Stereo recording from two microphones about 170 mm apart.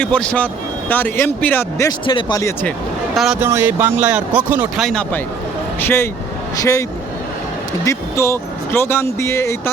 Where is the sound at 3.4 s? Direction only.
15° right (ahead or behind).